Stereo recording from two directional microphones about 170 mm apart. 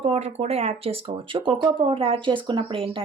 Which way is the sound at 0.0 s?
40° right (ahead or behind).